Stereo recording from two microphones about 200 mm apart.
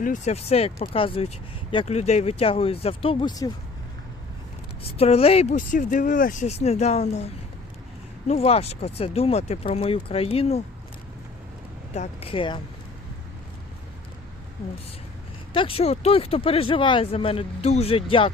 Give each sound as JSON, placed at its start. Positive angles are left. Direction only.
{"t": 0.0, "sound": "speech", "side_deg": 35}
{"t": 4.8, "sound": "speech", "side_deg": 30}
{"t": 8.3, "sound": "speech", "side_deg": 30}
{"t": 11.9, "sound": "speech", "side_deg": 30}
{"t": 15.5, "sound": "speech", "side_deg": 25}